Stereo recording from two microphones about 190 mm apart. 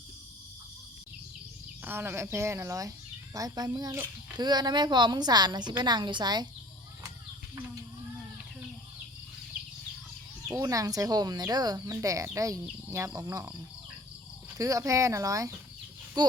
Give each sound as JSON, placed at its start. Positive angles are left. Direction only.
{"t": 1.8, "sound": "speech", "side_deg": -10}
{"t": 10.5, "sound": "speech", "side_deg": -15}
{"t": 14.6, "sound": "speech", "side_deg": -15}